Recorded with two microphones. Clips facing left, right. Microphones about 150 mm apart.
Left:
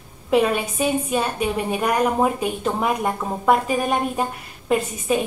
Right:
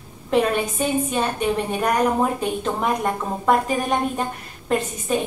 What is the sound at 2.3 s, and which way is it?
A woman's voice, 5° left (ahead or behind).